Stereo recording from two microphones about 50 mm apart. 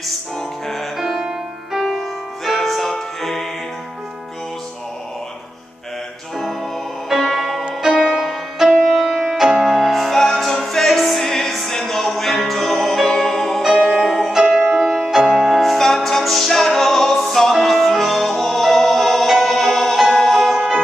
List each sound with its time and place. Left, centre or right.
0.7 s music: centre
6.3 s music: centre
14.6 s music: centre
14.9 s music: centre
20.5 s music: centre